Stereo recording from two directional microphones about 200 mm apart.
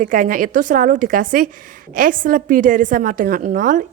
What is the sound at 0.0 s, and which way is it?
A woman's voice, 45° right (ahead or behind).